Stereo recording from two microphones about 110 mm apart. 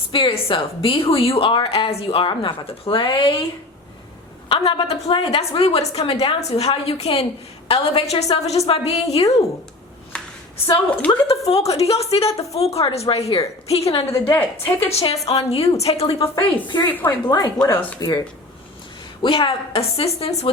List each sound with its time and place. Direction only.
0.1 s a woman's voice: 55° left (ahead or behind)
4.4 s a woman's voice: 55° left (ahead or behind); by 9.3 s 75° left (ahead or behind)
11.1 s a woman's voice: 65° left (ahead or behind)
14.3 s a woman's voice: 20° left (ahead or behind)
14.8 s a woman's voice: 65° left (ahead or behind)
16.4 s speech: 40° left (ahead or behind)
16.9 s speech: 15° left (ahead or behind)
17.2 s speech: 35° left (ahead or behind)
19.2 s a woman's voice: 55° left (ahead or behind)